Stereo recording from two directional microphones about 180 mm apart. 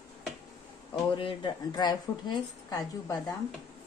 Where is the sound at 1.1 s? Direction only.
25° left (ahead or behind).